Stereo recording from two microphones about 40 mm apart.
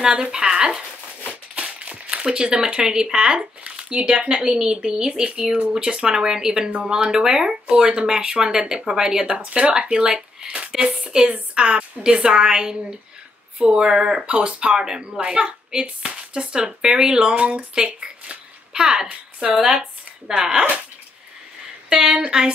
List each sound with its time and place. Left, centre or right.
0.0 s speech: right
1.6 s speech: right; by 20.6 s centre
21.8 s speech: centre